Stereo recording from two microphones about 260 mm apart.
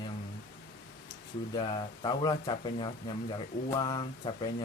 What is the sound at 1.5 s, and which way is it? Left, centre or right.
Speech, centre.